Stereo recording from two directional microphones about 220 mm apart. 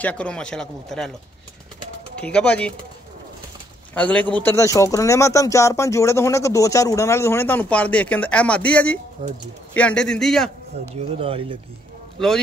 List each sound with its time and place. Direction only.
0.0 s speech: 5° left (ahead or behind)
2.1 s speech: 5° left (ahead or behind)
3.9 s speech: 5° left (ahead or behind)
11.0 s speech: 25° right (ahead or behind)